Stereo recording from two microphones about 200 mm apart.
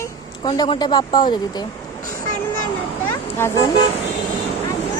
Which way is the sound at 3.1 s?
10° left (ahead or behind).